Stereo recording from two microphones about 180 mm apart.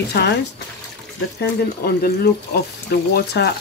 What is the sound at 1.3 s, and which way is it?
Speech, 60° left (ahead or behind).